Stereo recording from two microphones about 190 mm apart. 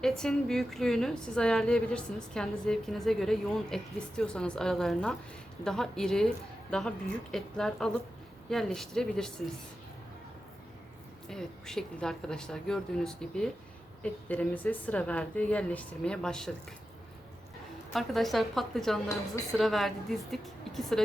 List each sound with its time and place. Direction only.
0.0 s a woman's voice: 5° left (ahead or behind)
11.3 s a woman's voice: 5° left (ahead or behind)
17.9 s a woman's voice: centre (ahead or behind)